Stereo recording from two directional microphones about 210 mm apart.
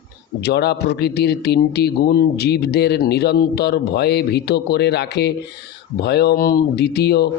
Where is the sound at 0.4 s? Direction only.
50° left (ahead or behind).